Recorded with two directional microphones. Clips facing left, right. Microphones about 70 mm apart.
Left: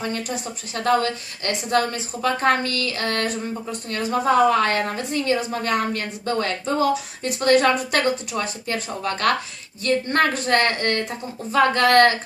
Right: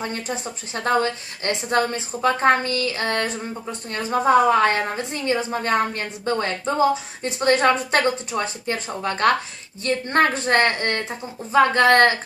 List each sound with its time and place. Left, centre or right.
0.0 s a woman's voice: right